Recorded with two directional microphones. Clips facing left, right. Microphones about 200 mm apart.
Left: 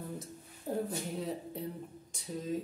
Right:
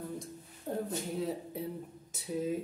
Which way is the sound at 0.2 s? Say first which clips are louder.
Right 1 dB; centre (ahead or behind).